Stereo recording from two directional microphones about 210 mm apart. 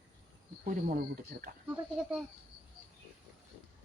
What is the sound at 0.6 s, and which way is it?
Speech, 40° right (ahead or behind).